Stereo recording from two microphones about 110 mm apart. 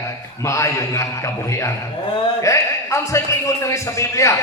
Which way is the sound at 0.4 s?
30° left (ahead or behind).